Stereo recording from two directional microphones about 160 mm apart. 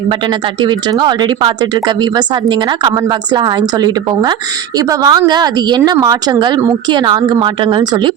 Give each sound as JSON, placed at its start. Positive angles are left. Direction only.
{"t": 0.1, "sound": "speech", "side_deg": -30}